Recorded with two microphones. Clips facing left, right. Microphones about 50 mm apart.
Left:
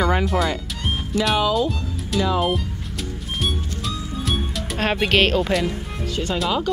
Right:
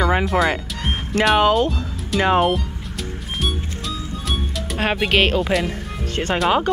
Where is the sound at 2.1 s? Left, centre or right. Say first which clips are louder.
Right 4 dB; right.